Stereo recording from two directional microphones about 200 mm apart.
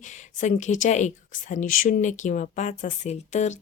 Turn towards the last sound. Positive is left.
turn(degrees=35)  # may be behind; listen again after turning